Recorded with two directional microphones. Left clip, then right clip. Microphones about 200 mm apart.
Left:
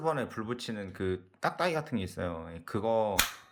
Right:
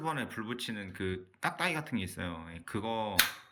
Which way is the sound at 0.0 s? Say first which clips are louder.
Left 4 dB; 30° left (ahead or behind).